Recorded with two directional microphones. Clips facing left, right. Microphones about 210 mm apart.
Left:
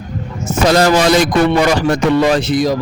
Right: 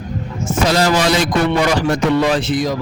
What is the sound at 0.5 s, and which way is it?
A man's voice, 45° left (ahead or behind).